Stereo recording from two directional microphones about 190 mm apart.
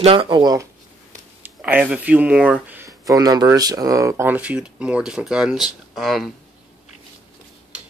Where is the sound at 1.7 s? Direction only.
5° right (ahead or behind).